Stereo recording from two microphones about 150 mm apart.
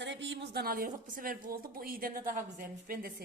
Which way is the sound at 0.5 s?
85° right.